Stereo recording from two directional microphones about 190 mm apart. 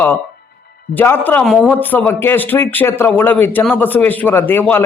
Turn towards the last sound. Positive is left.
turn(degrees=10)  # may be behind; listen again after turning